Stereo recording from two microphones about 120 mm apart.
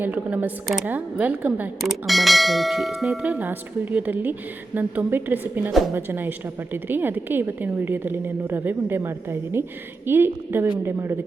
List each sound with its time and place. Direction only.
0.0 s bell: 10° right (ahead or behind)
1.8 s bell: centre (ahead or behind); by 9.6 s 20° right (ahead or behind)
10.1 s a woman's voice: 20° right (ahead or behind)